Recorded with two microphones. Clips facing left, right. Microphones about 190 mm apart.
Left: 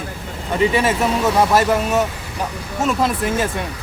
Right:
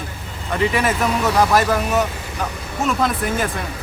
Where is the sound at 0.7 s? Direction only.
30° left (ahead or behind).